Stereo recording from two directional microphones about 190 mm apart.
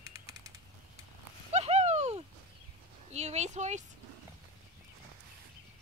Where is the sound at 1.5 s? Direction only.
35° right (ahead or behind).